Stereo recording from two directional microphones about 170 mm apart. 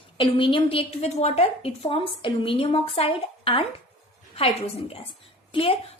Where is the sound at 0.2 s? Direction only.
30° left (ahead or behind).